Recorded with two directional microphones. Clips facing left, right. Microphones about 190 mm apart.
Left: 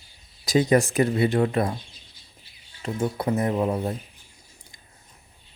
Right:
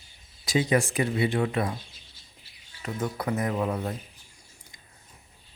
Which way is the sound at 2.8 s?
30° left (ahead or behind).